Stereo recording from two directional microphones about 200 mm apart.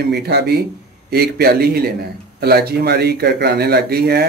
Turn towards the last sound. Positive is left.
turn(degrees=-50)  # may be behind; listen again after turning